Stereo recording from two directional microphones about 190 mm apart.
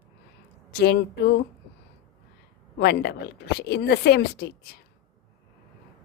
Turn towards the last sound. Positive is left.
turn(degrees=55)  # may be behind; listen again after turning